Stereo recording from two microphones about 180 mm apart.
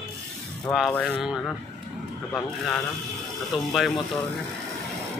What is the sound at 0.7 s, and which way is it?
Speech, centre (ahead or behind).